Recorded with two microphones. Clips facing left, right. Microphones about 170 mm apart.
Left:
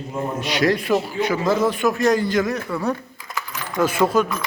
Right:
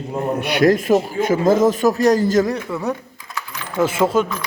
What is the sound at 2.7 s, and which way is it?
Speech, 20° right (ahead or behind).